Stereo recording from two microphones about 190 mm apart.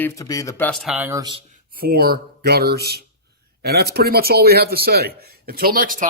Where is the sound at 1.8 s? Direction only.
55° right (ahead or behind).